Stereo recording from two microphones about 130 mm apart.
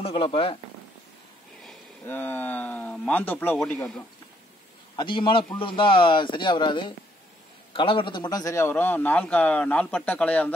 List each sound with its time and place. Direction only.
0.0 s speech: 45° left (ahead or behind)
2.0 s a man's voice: 15° left (ahead or behind)
4.9 s a man's voice: 40° left (ahead or behind); by 10.5 s 10° left (ahead or behind)